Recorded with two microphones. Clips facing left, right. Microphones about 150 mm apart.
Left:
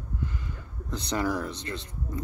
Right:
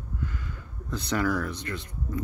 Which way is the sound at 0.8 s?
15° left (ahead or behind).